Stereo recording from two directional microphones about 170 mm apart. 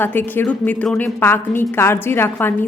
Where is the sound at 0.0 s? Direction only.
10° left (ahead or behind).